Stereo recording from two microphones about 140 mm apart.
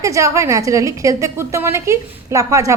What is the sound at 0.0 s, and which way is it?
A woman's voice, 20° right (ahead or behind).